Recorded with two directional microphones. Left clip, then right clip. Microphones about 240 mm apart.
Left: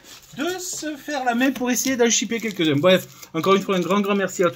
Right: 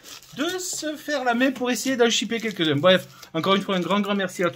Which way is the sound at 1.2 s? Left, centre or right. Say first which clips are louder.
Left 2 dB; centre.